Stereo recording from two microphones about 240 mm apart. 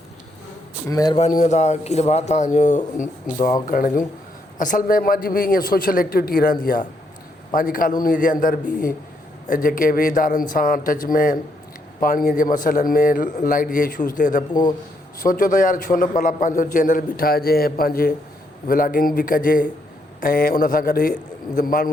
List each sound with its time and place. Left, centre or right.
0.9 s a man's voice: centre
1.2 s a man's voice: left